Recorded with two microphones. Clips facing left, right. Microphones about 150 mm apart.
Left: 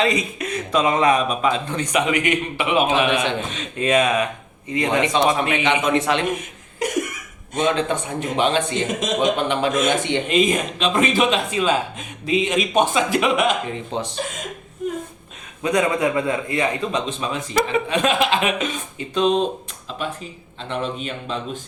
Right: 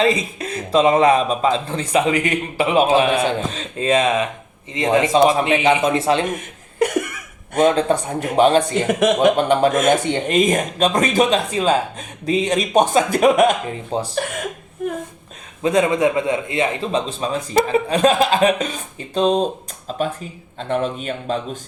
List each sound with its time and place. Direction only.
0.0 s speech: 30° right (ahead or behind)
6.7 s cough: 60° right (ahead or behind)
7.6 s speech: 35° right (ahead or behind)
8.9 s speech: 65° right (ahead or behind)
9.3 s speech: 40° right (ahead or behind)
14.2 s speech: 65° right (ahead or behind)
15.6 s speech: 25° right (ahead or behind); by 21.3 s 45° right (ahead or behind)